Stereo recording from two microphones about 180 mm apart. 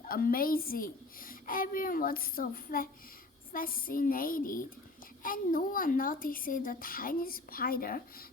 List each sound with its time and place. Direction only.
0.0 s a woman's voice: 55° left (ahead or behind)